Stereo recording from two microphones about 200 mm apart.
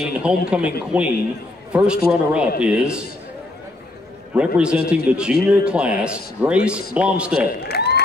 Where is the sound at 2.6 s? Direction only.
5° right (ahead or behind).